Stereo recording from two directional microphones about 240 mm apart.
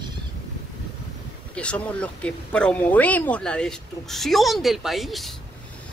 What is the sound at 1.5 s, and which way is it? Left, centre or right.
Speech, centre.